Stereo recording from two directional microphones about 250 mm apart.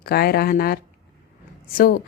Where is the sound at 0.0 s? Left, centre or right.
Left.